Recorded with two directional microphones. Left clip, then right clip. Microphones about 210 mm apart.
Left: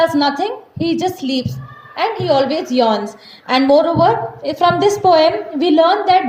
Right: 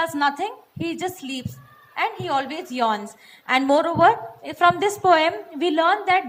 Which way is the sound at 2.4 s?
30° right (ahead or behind).